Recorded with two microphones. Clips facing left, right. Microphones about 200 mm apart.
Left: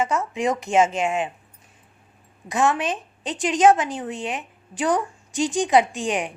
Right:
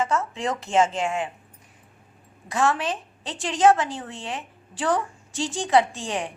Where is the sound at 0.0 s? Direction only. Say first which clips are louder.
Left 2 dB; 15° left (ahead or behind).